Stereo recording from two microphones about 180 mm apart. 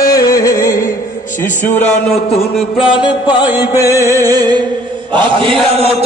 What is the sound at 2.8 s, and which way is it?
Music, 25° left (ahead or behind).